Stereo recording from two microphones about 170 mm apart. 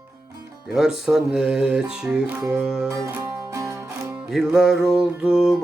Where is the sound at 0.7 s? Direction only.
5° right (ahead or behind).